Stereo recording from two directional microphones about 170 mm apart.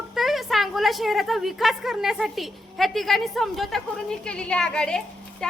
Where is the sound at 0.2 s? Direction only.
Centre (ahead or behind).